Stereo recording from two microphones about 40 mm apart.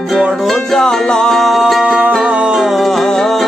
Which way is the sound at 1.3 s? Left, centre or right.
Centre.